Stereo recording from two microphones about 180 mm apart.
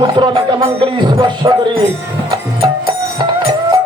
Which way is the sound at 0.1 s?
25° right (ahead or behind).